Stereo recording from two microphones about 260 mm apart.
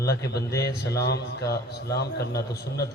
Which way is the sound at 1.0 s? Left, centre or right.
Left.